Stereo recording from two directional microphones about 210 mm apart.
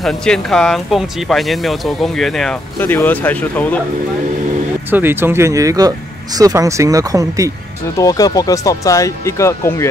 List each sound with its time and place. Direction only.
0.0 s speech: 5° left (ahead or behind)
4.9 s speech: 10° right (ahead or behind)
8.0 s speech: 15° left (ahead or behind)